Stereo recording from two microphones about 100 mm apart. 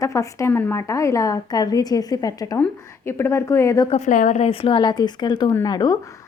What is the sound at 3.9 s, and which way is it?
Speech, 85° left.